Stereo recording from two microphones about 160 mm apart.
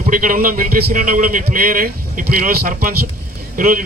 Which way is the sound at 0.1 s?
60° right (ahead or behind).